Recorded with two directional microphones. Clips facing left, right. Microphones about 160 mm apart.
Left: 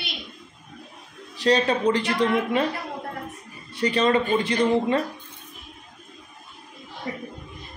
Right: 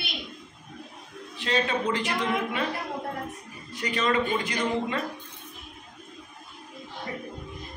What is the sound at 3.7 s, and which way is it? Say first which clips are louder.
Speech: left 5 dB; 30° left (ahead or behind).